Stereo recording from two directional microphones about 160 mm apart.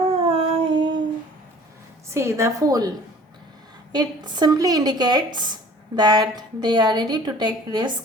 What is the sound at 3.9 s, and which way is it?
Speech, 25° right (ahead or behind).